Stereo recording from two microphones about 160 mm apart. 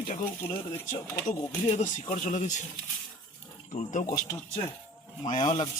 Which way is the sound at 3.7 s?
50° left (ahead or behind).